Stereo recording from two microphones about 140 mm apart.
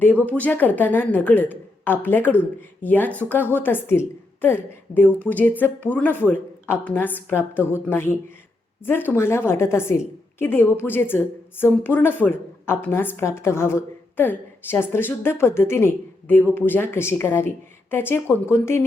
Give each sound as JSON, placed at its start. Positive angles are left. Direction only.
{"t": 0.3, "sound": "speech", "side_deg": 10}